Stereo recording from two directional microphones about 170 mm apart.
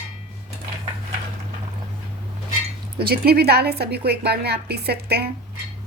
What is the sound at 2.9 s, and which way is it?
A woman's voice, 65° right (ahead or behind).